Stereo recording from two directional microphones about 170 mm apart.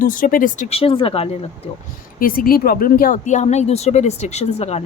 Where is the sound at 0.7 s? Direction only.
35° left (ahead or behind).